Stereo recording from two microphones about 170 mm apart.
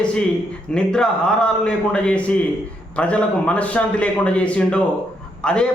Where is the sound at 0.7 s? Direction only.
5° left (ahead or behind).